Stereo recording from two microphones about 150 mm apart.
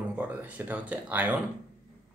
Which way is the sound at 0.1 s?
10° right (ahead or behind).